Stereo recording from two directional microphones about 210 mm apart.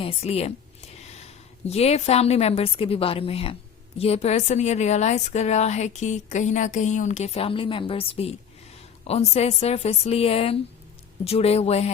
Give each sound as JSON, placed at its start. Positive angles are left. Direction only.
{"t": 0.0, "sound": "a woman's voice", "side_deg": 30}